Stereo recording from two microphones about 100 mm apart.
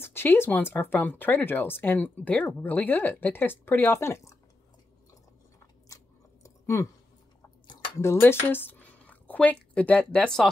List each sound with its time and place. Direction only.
0.0 s speech: 25° left (ahead or behind)
6.4 s a sound: 30° left (ahead or behind)
8.0 s speech: 25° left (ahead or behind); by 10.5 s 5° left (ahead or behind)